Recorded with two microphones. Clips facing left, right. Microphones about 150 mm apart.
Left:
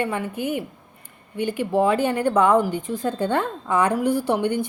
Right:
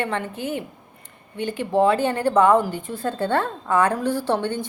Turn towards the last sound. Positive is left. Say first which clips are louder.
# left 2 dB
turn(degrees=15)  # may be behind; listen again after turning